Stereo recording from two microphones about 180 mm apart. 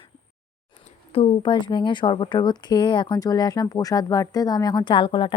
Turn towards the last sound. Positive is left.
turn(degrees=30)  # may be behind; listen again after turning